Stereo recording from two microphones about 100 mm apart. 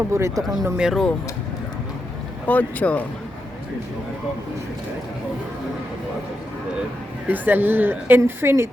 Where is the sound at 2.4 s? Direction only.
15° left (ahead or behind).